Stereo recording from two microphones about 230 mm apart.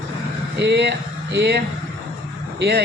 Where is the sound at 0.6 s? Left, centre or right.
Right.